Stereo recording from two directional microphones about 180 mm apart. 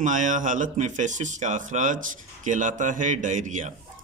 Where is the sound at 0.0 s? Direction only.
45° right (ahead or behind).